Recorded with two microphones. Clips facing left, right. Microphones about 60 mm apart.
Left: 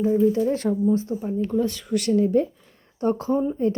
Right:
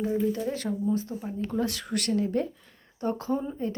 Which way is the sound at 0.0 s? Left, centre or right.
Centre.